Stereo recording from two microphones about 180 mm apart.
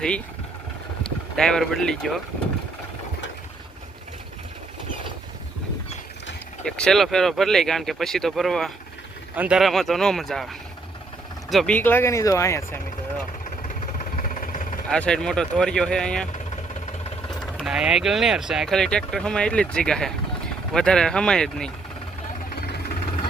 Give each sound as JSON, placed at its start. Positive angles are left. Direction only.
{"t": 1.4, "sound": "speech", "side_deg": 5}
{"t": 6.7, "sound": "speech", "side_deg": 5}
{"t": 11.5, "sound": "speech", "side_deg": 5}
{"t": 13.6, "sound": "vehicle", "side_deg": 45}
{"t": 14.8, "sound": "speech", "side_deg": 5}
{"t": 17.4, "sound": "speech", "side_deg": 0}